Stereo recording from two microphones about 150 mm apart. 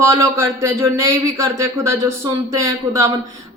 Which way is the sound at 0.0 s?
20° right (ahead or behind).